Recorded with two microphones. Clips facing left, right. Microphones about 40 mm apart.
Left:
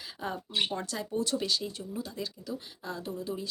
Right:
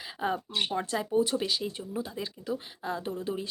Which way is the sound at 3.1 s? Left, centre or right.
Right.